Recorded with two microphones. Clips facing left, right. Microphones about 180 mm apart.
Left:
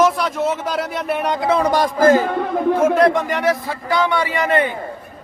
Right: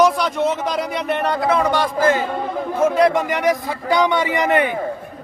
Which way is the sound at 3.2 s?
15° right (ahead or behind).